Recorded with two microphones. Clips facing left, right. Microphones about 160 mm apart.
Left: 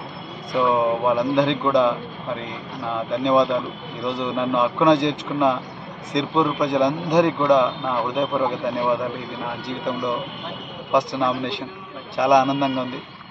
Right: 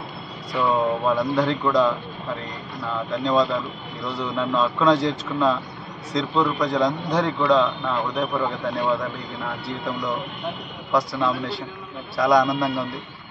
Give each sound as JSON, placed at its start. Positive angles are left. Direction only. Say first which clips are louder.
{"t": 0.5, "sound": "a man's voice", "louder": "left 2 dB", "side_deg": 20}